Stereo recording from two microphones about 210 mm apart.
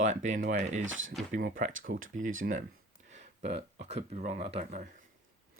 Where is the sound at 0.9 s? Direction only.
65° right (ahead or behind).